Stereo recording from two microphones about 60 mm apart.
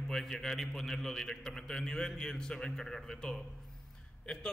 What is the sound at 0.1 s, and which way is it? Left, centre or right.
A man's voice, centre.